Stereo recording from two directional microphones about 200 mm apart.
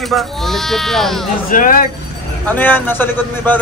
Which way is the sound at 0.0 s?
Centre (ahead or behind).